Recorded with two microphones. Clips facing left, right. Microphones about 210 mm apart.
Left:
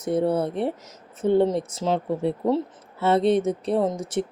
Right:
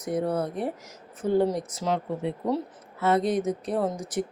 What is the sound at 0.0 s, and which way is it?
Speech, 30° left (ahead or behind).